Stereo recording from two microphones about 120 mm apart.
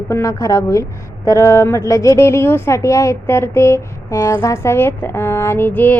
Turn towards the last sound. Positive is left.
turn(degrees=15)  # may be behind; listen again after turning